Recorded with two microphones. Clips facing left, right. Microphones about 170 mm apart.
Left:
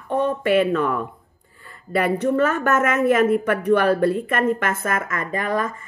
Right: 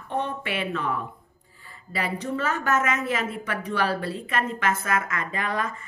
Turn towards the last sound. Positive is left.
turn(degrees=45)  # may be behind; listen again after turning